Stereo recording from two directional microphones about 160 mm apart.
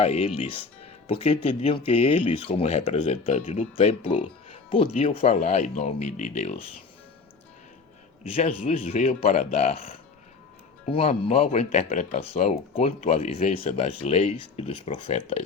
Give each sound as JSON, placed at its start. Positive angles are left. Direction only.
{"t": 0.0, "sound": "speech", "side_deg": 40}
{"t": 8.2, "sound": "speech", "side_deg": 40}